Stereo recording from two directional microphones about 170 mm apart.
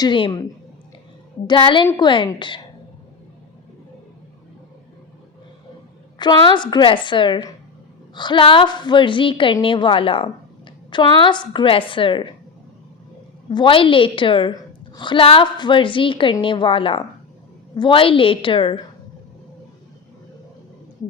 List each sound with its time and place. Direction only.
0.0 s a woman's voice: 25° left (ahead or behind)
1.5 s a woman's voice: 30° left (ahead or behind)
6.1 s a woman's voice: 25° left (ahead or behind)
13.5 s a woman's voice: 30° left (ahead or behind)